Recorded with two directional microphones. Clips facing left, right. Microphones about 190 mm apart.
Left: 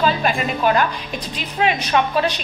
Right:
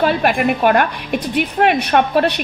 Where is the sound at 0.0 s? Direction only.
65° right (ahead or behind).